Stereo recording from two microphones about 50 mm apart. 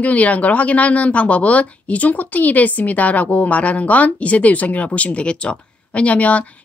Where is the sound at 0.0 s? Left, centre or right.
Left.